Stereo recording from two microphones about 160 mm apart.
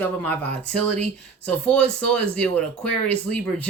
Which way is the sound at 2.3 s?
5° left (ahead or behind).